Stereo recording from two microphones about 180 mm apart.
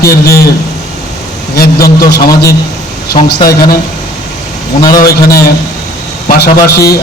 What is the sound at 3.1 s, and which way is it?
Speech, 55° left (ahead or behind).